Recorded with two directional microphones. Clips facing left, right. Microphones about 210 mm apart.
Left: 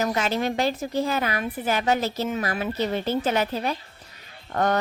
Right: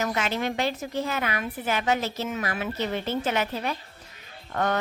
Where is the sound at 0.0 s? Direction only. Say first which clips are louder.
Left 3 dB; 35° left (ahead or behind).